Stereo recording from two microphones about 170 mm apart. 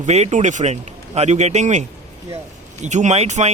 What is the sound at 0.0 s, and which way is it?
Speech, 40° right (ahead or behind).